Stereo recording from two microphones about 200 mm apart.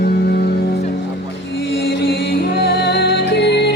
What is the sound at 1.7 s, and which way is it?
Music, 60° left (ahead or behind).